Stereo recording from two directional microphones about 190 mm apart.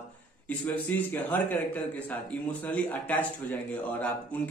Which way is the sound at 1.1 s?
10° left (ahead or behind).